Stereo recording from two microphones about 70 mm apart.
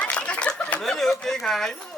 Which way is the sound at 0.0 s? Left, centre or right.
Centre.